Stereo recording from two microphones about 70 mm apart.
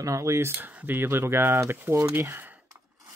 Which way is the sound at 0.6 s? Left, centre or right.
Right.